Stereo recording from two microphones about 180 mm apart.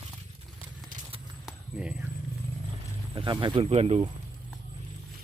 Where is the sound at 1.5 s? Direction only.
5° right (ahead or behind).